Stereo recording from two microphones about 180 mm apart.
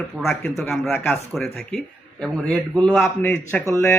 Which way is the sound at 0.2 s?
Centre (ahead or behind).